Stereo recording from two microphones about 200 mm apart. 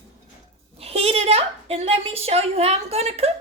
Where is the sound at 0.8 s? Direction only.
30° right (ahead or behind).